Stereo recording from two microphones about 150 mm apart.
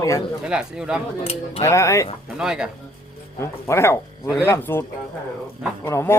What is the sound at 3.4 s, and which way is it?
Speech, 15° left (ahead or behind).